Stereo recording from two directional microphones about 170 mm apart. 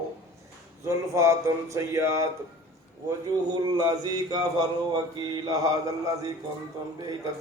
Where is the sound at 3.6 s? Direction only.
25° right (ahead or behind).